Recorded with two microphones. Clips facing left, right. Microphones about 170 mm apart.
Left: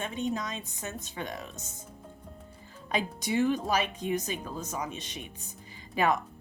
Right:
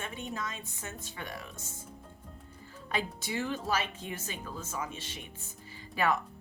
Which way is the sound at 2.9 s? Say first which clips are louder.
Left 5 dB; 20° left (ahead or behind).